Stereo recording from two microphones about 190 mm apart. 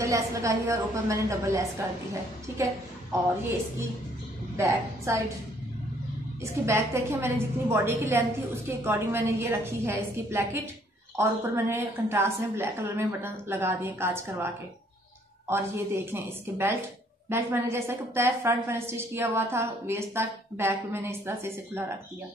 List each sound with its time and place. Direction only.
0.0 s a woman's voice: 15° right (ahead or behind)
4.6 s a woman's voice: 15° right (ahead or behind)
6.6 s a woman's voice: 15° right (ahead or behind)
15.5 s a woman's voice: 15° right (ahead or behind)